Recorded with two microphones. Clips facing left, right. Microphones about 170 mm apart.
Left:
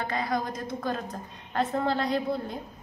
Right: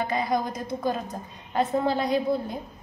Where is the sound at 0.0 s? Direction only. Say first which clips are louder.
Right 4 dB; 15° right (ahead or behind).